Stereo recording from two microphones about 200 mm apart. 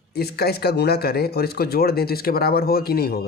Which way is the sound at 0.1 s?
55° left (ahead or behind).